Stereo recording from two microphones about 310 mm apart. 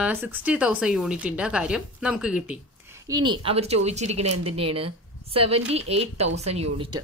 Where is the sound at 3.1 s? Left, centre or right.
Centre.